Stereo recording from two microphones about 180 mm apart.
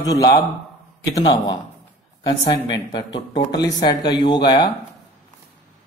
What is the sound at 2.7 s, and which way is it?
Speech, 25° left (ahead or behind).